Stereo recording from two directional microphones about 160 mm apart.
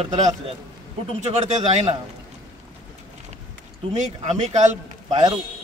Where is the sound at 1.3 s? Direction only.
45° right (ahead or behind).